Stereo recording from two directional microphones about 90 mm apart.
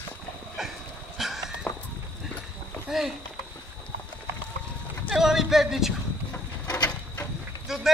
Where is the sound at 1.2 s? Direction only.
Centre (ahead or behind).